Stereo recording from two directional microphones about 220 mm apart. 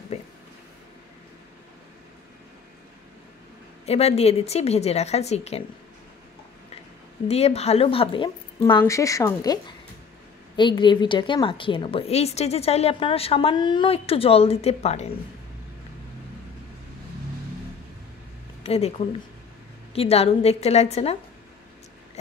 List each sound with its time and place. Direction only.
3.8 s a woman's voice: 30° left (ahead or behind)
7.2 s a woman's voice: 30° left (ahead or behind)
18.6 s a woman's voice: 30° left (ahead or behind)